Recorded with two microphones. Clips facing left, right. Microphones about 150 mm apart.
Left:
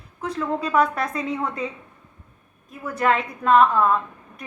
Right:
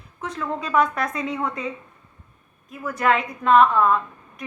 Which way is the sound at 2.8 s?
30° left (ahead or behind).